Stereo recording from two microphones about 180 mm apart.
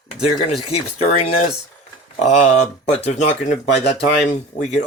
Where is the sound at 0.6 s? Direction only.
35° left (ahead or behind).